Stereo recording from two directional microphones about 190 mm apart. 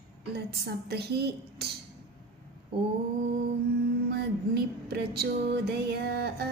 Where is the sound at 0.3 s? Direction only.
60° right (ahead or behind).